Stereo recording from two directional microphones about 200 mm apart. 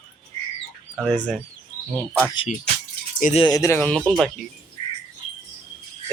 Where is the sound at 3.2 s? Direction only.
30° left (ahead or behind).